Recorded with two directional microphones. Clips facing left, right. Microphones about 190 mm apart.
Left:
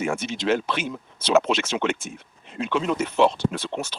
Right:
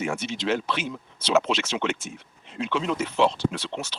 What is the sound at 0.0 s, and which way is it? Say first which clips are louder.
Speech: left 2 dB; 50° left (ahead or behind).